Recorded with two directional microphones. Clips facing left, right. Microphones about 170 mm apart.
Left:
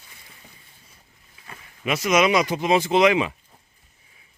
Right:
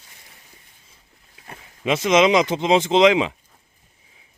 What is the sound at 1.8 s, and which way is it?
Speech, 25° right (ahead or behind).